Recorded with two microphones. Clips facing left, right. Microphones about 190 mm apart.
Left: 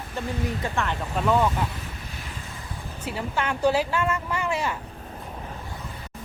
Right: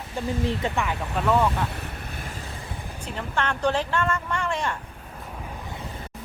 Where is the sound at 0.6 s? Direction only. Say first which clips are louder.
Right 2 dB; 25° right (ahead or behind).